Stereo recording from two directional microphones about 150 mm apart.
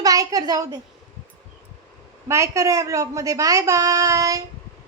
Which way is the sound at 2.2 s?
20° right (ahead or behind).